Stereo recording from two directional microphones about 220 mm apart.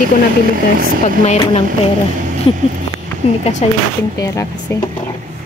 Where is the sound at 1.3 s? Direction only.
25° left (ahead or behind).